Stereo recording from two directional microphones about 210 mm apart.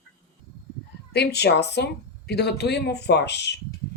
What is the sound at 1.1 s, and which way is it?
Speech, 50° left (ahead or behind).